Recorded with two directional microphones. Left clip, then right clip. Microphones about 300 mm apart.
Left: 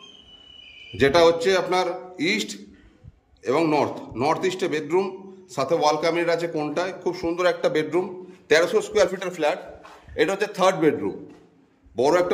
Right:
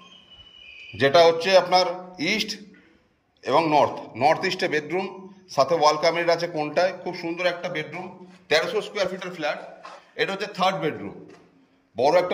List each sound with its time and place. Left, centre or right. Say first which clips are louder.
0.9 s a man's voice: even; centre
12.0 s a man's voice: even; centre